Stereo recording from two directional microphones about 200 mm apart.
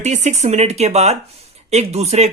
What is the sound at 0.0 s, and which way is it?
Speech, 35° right (ahead or behind).